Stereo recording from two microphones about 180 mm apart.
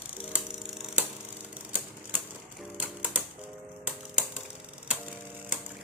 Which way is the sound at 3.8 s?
5° right (ahead or behind).